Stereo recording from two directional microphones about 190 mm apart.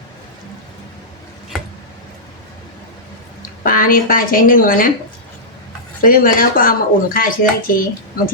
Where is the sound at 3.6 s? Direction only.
45° left (ahead or behind).